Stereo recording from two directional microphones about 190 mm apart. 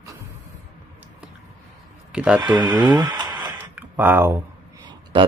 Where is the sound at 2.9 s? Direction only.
20° right (ahead or behind).